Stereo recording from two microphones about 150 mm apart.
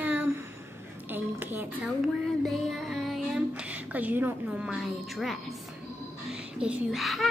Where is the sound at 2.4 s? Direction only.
Centre (ahead or behind).